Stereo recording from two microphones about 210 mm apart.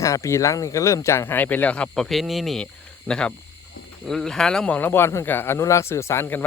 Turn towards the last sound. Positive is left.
turn(degrees=10)  # may be behind; listen again after turning